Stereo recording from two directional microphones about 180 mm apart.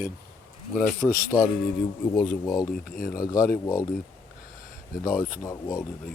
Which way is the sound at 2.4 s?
20° left (ahead or behind).